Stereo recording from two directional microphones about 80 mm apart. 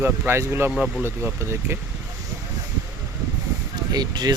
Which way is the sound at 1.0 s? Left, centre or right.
Right.